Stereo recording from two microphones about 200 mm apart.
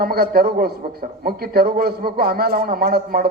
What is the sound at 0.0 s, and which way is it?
A man's voice, 50° right (ahead or behind).